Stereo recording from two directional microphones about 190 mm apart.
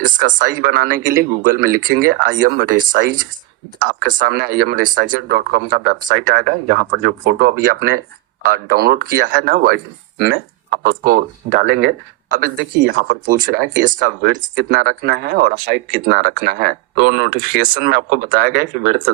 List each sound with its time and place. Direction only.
0.3 s speech: 50° right (ahead or behind)